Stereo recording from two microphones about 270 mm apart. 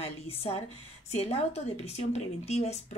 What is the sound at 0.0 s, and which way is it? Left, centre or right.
A woman's voice, left.